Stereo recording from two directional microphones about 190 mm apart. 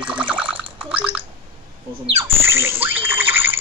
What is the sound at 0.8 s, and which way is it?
Gargling, 10° right (ahead or behind).